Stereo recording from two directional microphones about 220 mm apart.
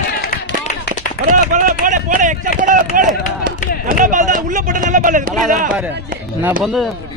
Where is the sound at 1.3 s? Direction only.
35° right (ahead or behind).